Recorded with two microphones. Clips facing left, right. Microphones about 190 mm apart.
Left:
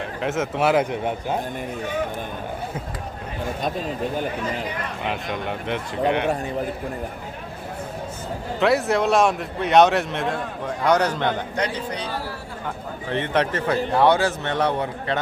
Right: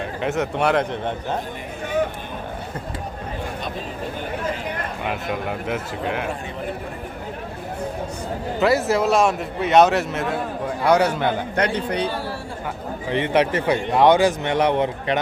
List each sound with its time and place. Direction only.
0.2 s a man's voice: centre (ahead or behind)
5.0 s a man's voice: 5° right (ahead or behind)
8.6 s a man's voice: centre (ahead or behind)
11.5 s a man's voice: 60° right (ahead or behind)
13.1 s a man's voice: 10° right (ahead or behind)